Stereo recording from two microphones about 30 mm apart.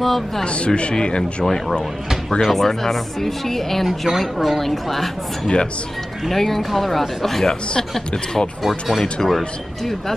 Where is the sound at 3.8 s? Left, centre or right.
Centre.